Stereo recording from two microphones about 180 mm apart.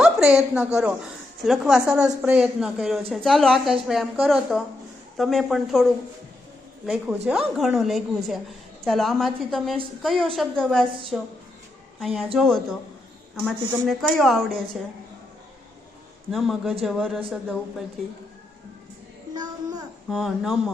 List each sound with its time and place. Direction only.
0.0 s a woman's voice: 5° right (ahead or behind)
12.2 s a woman's voice: centre (ahead or behind)
16.3 s a woman's voice: centre (ahead or behind)
19.3 s a sound: 20° right (ahead or behind)
20.1 s a woman's voice: centre (ahead or behind)